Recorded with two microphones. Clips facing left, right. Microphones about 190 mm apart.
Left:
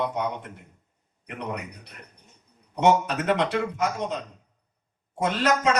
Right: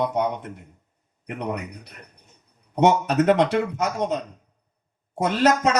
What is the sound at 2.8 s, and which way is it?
Speech, 45° right (ahead or behind).